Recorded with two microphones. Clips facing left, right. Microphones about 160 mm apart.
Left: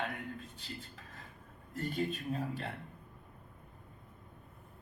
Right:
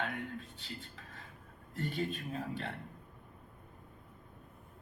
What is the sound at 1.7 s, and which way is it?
Speech, 40° left (ahead or behind).